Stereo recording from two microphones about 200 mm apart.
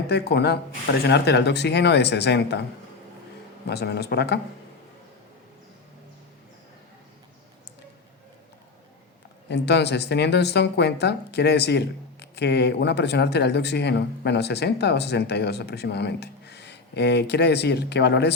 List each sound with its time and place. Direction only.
0.1 s speech: 55° left (ahead or behind)
3.7 s speech: 55° left (ahead or behind)
9.5 s speech: 55° left (ahead or behind)